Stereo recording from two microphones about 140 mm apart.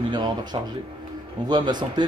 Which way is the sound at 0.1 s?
30° right (ahead or behind).